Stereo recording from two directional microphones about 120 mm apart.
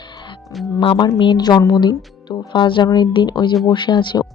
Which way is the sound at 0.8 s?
45° left (ahead or behind).